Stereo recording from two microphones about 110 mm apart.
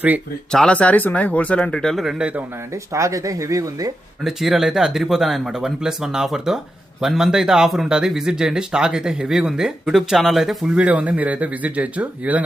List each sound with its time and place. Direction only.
0.5 s speech: 10° left (ahead or behind); by 2.4 s 10° right (ahead or behind)
2.9 s speech: 30° right (ahead or behind)
4.2 s speech: 5° right (ahead or behind)